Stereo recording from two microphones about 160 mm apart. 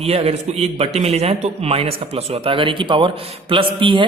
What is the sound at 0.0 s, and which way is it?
A man's voice, 40° right (ahead or behind).